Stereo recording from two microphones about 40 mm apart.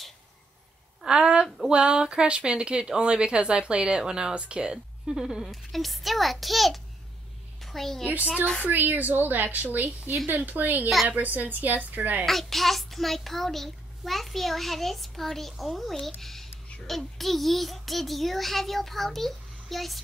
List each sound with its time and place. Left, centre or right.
1.0 s a sound: right
1.7 s speech: right
5.5 s a child's voice: centre
8.0 s a woman's voice: right
12.3 s a child's voice: centre